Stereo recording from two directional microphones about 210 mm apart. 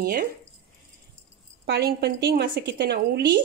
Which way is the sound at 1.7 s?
50° right (ahead or behind).